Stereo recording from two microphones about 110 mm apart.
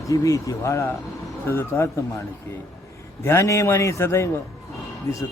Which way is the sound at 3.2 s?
25° left (ahead or behind).